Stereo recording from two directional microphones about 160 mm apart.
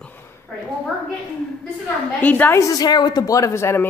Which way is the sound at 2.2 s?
10° left (ahead or behind).